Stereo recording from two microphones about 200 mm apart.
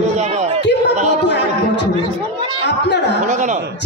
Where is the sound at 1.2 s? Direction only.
60° left (ahead or behind).